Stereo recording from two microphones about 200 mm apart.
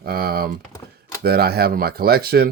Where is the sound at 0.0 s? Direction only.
50° right (ahead or behind).